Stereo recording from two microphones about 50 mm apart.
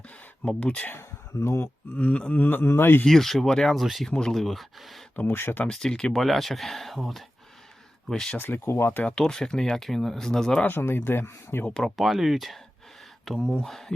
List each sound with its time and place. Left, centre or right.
0.4 s speech: left
1.4 s speech: left
2.0 s speech: left
3.1 s speech: centre
3.8 s speech: centre
5.1 s speech: left
5.7 s speech: centre
6.2 s speech: centre
8.4 s speech: left
8.6 s speech: left
9.0 s speech: centre
10.7 s speech: left
11.9 s speech: centre
13.6 s speech: centre